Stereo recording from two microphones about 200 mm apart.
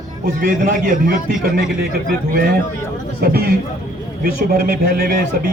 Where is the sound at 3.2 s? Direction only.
50° right (ahead or behind).